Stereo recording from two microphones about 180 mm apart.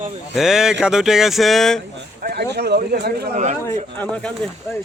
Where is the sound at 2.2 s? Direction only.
55° right (ahead or behind).